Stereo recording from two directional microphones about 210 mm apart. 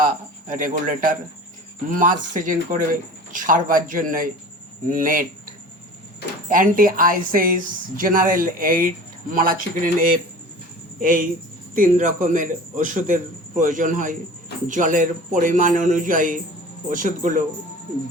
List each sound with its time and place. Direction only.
0.0 s a woman's voice: 40° right (ahead or behind)